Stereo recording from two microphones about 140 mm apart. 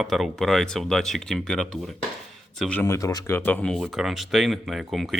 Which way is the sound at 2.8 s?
20° left (ahead or behind).